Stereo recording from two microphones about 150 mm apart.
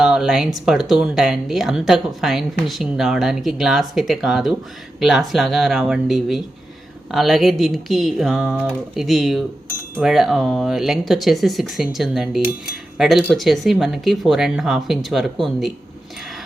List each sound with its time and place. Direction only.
0.0 s speech: 5° right (ahead or behind)